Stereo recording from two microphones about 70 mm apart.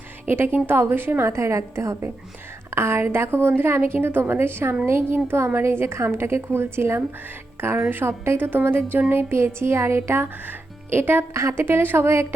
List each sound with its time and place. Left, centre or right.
0.3 s a woman's voice: right